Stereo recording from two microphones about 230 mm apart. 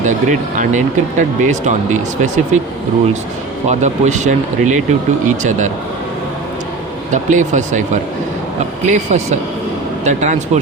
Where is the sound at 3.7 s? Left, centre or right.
Right.